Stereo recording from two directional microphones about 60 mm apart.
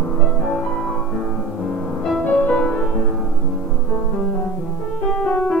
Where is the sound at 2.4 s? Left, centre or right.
Centre.